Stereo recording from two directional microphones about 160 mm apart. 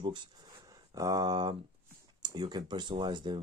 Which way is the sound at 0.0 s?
30° right (ahead or behind).